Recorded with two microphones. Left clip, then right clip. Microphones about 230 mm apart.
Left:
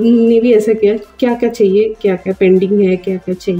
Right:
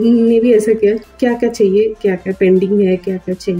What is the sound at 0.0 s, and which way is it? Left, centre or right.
Speech, centre.